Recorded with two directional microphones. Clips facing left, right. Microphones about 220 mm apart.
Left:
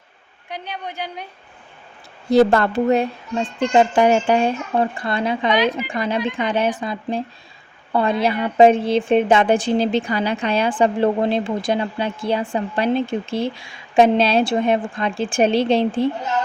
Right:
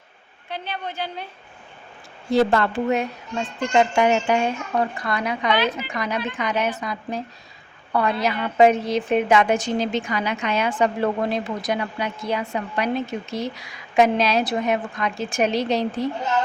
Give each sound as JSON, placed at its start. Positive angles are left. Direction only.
{"t": 0.5, "sound": "a woman's voice", "side_deg": 15}
{"t": 2.3, "sound": "a woman's voice", "side_deg": 40}
{"t": 5.5, "sound": "a woman's voice", "side_deg": 15}
{"t": 5.9, "sound": "speech", "side_deg": 30}